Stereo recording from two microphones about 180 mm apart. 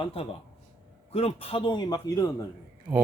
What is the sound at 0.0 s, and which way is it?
A man's voice, 30° left (ahead or behind).